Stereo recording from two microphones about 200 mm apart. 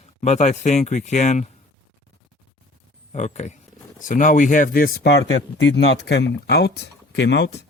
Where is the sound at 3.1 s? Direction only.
35° left (ahead or behind); by 7.5 s 60° left (ahead or behind).